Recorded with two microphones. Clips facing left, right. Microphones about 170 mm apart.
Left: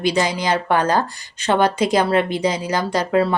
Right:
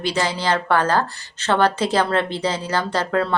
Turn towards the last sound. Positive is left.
turn(degrees=10)  # may be behind; listen again after turning